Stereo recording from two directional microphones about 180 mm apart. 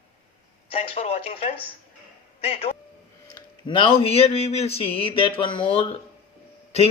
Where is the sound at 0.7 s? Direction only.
35° left (ahead or behind).